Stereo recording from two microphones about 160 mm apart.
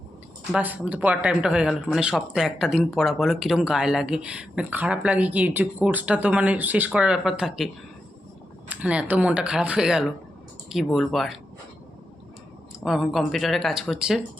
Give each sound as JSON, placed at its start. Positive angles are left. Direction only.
{"t": 0.5, "sound": "speech", "side_deg": -10}
{"t": 8.7, "sound": "speech", "side_deg": -10}
{"t": 12.8, "sound": "speech", "side_deg": 0}